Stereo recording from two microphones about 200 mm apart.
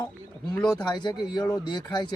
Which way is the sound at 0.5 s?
10° left (ahead or behind).